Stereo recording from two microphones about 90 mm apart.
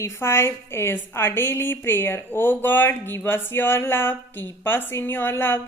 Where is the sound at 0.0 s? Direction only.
30° left (ahead or behind).